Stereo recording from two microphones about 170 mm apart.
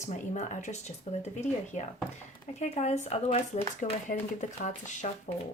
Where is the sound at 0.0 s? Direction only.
45° left (ahead or behind).